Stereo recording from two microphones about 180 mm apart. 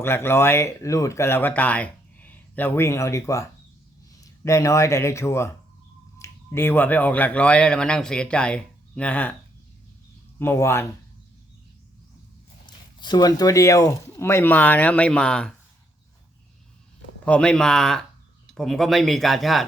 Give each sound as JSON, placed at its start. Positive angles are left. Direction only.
{"t": 0.0, "sound": "speech", "side_deg": 15}
{"t": 10.4, "sound": "speech", "side_deg": 15}
{"t": 13.0, "sound": "speech", "side_deg": 25}
{"t": 17.2, "sound": "speech", "side_deg": 5}